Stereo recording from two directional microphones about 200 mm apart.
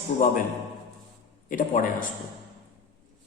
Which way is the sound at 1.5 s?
40° left (ahead or behind).